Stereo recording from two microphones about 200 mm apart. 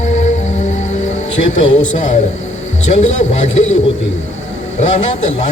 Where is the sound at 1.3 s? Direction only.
70° left (ahead or behind).